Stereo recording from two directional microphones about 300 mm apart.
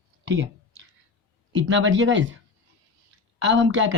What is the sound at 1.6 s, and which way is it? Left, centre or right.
Speech, right.